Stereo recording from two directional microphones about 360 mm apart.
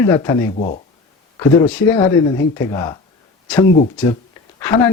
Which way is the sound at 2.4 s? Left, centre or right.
Centre.